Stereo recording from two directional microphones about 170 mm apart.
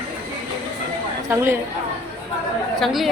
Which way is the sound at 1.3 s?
15° right (ahead or behind).